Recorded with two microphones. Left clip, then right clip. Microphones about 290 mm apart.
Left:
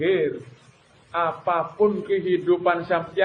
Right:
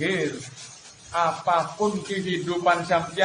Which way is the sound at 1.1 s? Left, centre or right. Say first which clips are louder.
Right 1 dB; right.